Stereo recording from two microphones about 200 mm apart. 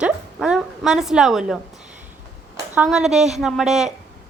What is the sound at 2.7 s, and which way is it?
A woman's voice, 5° right (ahead or behind).